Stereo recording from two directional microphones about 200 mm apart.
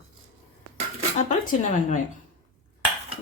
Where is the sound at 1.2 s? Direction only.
35° left (ahead or behind).